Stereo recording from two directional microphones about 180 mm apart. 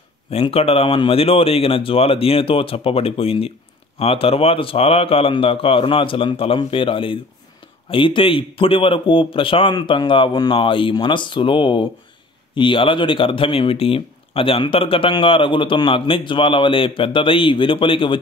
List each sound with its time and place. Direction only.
0.3 s speech: 35° left (ahead or behind)